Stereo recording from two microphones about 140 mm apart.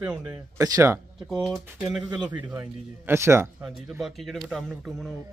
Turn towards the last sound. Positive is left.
turn(degrees=0)  # may be behind; listen again after turning